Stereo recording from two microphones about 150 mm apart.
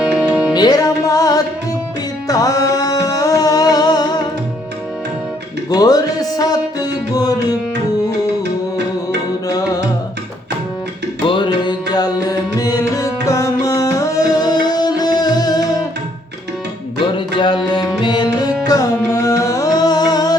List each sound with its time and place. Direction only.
0.0 s music: 5° right (ahead or behind)
0.5 s music: 25° left (ahead or behind)
5.7 s music: 25° left (ahead or behind)
11.3 s music: 35° left (ahead or behind)
17.2 s music: 30° left (ahead or behind)